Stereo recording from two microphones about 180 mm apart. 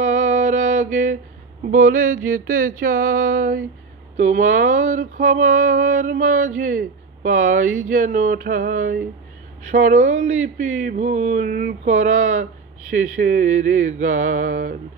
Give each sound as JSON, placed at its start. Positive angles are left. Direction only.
{"t": 0.0, "sound": "music", "side_deg": -45}
{"t": 1.6, "sound": "female singing", "side_deg": -50}